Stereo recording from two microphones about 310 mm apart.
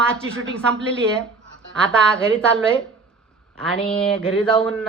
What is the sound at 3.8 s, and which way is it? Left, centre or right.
Speech, centre.